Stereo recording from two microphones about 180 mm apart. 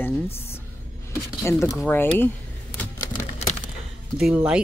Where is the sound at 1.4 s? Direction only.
15° left (ahead or behind).